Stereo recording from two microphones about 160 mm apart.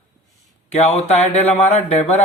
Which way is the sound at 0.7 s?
45° left (ahead or behind).